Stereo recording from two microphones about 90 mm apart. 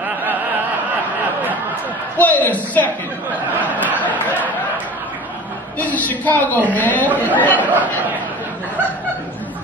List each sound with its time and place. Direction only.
2.1 s a woman's voice: 20° left (ahead or behind)
5.8 s a woman's voice: 20° left (ahead or behind)
7.6 s speech: 20° right (ahead or behind)